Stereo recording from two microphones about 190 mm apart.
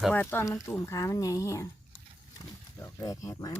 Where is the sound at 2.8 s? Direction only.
15° left (ahead or behind).